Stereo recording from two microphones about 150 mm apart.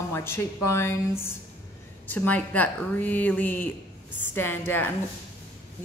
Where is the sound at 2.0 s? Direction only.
10° left (ahead or behind).